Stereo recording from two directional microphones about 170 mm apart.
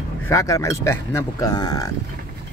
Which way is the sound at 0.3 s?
20° left (ahead or behind).